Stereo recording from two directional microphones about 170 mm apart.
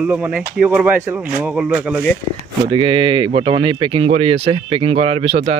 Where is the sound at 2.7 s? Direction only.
30° right (ahead or behind).